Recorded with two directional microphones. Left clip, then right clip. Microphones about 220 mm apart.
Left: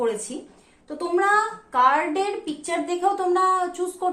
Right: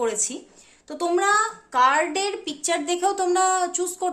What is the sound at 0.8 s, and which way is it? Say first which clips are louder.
A woman's voice: even; 50° right (ahead or behind).